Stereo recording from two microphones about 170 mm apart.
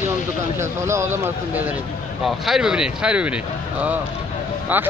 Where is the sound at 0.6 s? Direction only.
15° right (ahead or behind).